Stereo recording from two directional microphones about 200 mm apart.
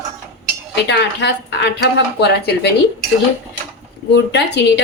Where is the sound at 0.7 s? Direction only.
55° left (ahead or behind).